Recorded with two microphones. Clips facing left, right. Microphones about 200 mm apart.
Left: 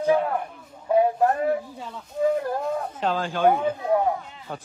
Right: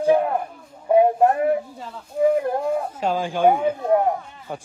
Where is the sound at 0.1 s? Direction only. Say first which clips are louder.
Right 3 dB; 15° right (ahead or behind).